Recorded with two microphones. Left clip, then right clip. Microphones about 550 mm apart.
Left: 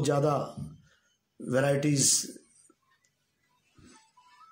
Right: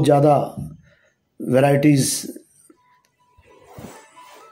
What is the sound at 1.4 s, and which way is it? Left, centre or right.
Speech, left.